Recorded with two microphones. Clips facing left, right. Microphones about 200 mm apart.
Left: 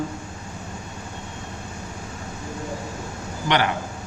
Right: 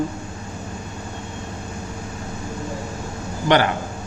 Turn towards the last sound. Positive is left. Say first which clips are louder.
# right 5 dB
turn(degrees=-45)  # may be behind; listen again after turning